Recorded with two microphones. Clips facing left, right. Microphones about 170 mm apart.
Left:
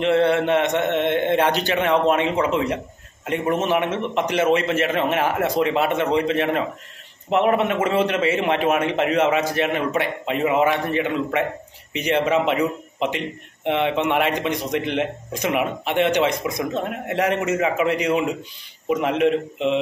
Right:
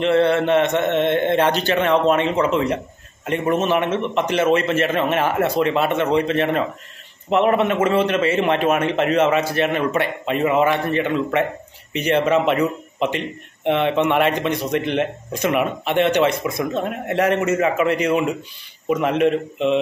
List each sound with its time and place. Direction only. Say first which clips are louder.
0.0 s a man's voice: right 1 dB; 15° left (ahead or behind)